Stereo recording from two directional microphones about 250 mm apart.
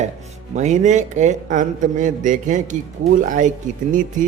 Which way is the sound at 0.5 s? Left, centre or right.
Right.